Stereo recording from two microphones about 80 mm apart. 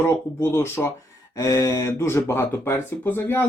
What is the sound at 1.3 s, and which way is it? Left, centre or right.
Speech, left.